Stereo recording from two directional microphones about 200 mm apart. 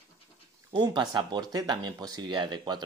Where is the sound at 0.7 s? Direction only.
20° right (ahead or behind).